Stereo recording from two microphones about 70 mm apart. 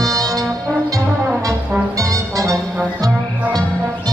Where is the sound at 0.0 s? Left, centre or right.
Right.